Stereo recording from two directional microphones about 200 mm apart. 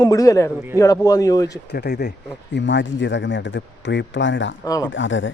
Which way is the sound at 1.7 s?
55° left (ahead or behind).